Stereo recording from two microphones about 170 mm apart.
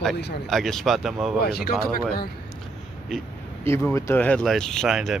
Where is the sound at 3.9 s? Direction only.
15° left (ahead or behind).